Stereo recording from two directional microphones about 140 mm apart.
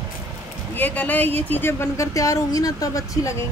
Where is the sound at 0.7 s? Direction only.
10° left (ahead or behind).